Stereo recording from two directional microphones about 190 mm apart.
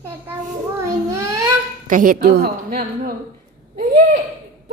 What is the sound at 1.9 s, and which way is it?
A woman's voice, 45° right (ahead or behind).